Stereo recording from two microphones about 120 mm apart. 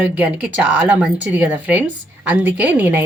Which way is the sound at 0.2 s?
10° right (ahead or behind).